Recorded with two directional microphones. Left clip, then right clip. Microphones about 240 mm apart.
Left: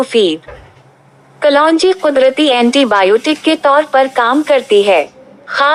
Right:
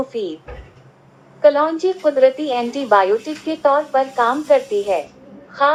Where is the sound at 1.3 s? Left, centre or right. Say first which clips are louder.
Left 5 dB; left.